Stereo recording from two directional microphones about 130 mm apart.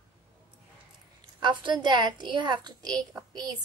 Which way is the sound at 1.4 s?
35° right (ahead or behind).